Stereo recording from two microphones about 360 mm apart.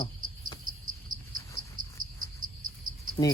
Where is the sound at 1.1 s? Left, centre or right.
Right.